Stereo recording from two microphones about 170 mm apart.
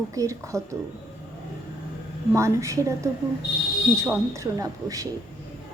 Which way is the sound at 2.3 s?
15° right (ahead or behind).